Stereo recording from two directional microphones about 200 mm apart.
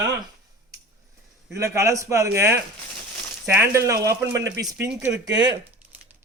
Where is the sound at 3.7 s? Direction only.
15° right (ahead or behind).